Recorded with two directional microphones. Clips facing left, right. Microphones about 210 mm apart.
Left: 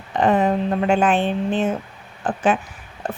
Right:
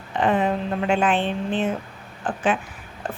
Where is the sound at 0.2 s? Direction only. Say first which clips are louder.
Left 3 dB; 40° left (ahead or behind).